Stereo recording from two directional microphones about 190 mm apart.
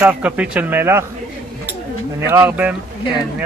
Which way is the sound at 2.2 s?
15° right (ahead or behind).